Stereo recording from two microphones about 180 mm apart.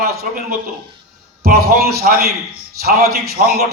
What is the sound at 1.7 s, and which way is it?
Speech, 60° right (ahead or behind).